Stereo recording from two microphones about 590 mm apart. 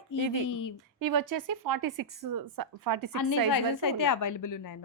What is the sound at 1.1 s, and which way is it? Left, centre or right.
A woman's voice, right.